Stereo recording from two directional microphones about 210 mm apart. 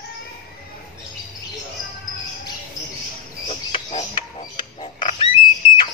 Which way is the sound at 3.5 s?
25° left (ahead or behind).